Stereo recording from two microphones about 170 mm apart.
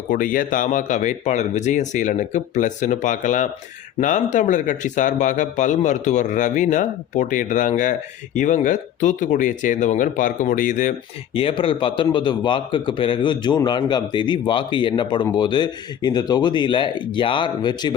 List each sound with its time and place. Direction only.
0.1 s speech: 55° left (ahead or behind)
11.3 s a man's voice: 35° left (ahead or behind)